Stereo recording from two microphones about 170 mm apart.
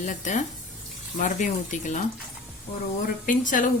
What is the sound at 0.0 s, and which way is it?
Speech, 45° left (ahead or behind).